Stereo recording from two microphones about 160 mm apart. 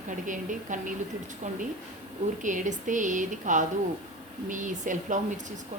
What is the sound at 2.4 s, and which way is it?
Speech, 50° right (ahead or behind).